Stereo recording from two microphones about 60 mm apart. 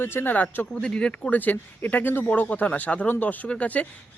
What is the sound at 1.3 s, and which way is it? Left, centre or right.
Speech, left.